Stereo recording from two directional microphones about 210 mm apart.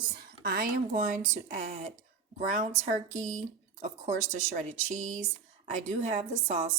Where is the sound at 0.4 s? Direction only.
45° right (ahead or behind).